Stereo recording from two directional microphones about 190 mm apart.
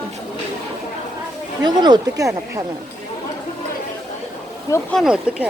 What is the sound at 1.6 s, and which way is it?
Speech, 20° right (ahead or behind).